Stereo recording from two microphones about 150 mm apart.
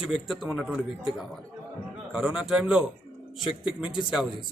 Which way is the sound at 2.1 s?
5° right (ahead or behind).